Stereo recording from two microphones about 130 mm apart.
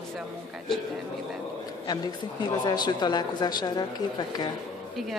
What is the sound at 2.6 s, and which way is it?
Speech, 35° left (ahead or behind).